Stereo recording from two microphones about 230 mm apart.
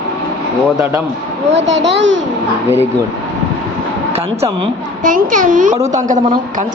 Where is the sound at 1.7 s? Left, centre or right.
Right.